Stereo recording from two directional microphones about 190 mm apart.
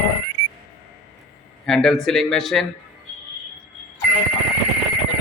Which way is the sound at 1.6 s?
Centre (ahead or behind).